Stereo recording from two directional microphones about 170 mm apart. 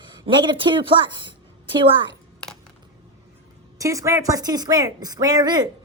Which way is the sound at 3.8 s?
20° right (ahead or behind).